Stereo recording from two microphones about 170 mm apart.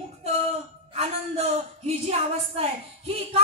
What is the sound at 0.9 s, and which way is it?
A woman's voice, 35° right (ahead or behind).